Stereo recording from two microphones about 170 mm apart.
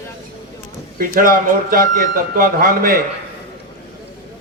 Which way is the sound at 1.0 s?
55° right (ahead or behind).